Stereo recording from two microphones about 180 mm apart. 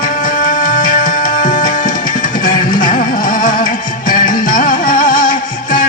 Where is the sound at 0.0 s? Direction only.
45° left (ahead or behind).